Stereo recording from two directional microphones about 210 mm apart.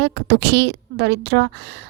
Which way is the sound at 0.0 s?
50° right (ahead or behind).